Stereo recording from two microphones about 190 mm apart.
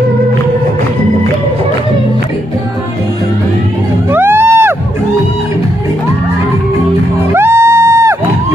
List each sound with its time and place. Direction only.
4.1 s music: 10° right (ahead or behind)
7.3 s music: 15° right (ahead or behind)